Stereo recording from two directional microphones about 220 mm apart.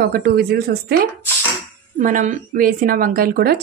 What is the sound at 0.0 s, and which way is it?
Speech, 40° right (ahead or behind).